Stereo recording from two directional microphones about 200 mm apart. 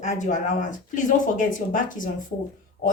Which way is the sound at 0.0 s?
35° left (ahead or behind).